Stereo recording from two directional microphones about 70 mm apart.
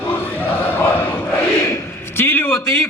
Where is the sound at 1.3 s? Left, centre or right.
Left.